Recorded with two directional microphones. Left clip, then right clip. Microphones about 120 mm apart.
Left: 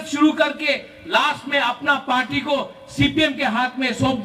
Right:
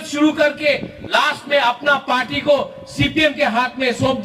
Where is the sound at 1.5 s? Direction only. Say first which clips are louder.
Right 5 dB; 35° left (ahead or behind).